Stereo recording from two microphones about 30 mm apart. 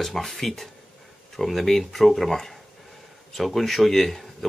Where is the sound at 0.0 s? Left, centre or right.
Centre.